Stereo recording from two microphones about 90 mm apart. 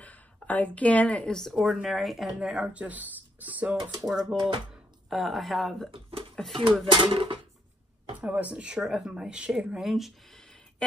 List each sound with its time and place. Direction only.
0.0 s speech: 15° left (ahead or behind); by 3.7 s 20° right (ahead or behind)
4.0 s a woman's voice: 5° right (ahead or behind)
4.4 s speech: 65° right (ahead or behind)
5.1 s a woman's voice: centre (ahead or behind)
5.9 s speech: 90° right
6.3 s speech: centre (ahead or behind)
6.8 s speech: 80° right
8.2 s speech: 15° right (ahead or behind); by 10.9 s 5° left (ahead or behind)